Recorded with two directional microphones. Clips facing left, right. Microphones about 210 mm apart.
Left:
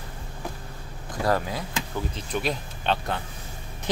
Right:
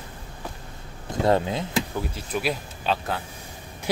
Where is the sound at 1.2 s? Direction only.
25° right (ahead or behind).